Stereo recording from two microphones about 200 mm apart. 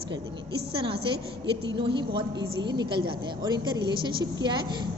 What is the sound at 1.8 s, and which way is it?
A woman's voice, 25° right (ahead or behind).